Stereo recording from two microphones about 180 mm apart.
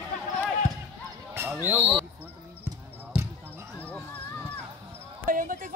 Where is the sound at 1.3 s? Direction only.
10° right (ahead or behind).